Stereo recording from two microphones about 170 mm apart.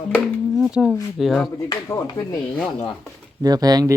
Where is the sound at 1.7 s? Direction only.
20° left (ahead or behind).